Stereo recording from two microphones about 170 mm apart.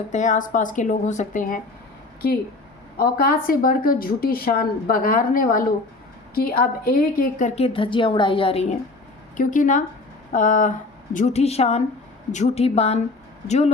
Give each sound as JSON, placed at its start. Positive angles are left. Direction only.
{"t": 0.1, "sound": "speech", "side_deg": 45}
{"t": 3.0, "sound": "a woman's voice", "side_deg": 60}
{"t": 9.4, "sound": "a woman's voice", "side_deg": 50}